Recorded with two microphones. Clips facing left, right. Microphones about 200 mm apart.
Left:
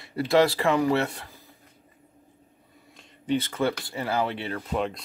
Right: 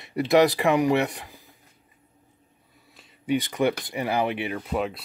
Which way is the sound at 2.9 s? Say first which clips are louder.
Right 1 dB; 10° right (ahead or behind).